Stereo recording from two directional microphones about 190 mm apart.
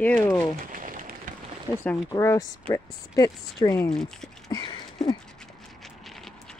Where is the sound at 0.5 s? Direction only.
45° right (ahead or behind).